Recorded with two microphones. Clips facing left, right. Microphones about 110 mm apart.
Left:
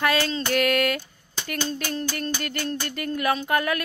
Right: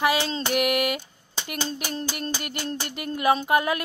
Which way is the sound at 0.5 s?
15° right (ahead or behind).